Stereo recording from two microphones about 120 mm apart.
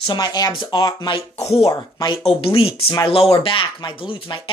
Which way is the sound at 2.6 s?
50° left (ahead or behind).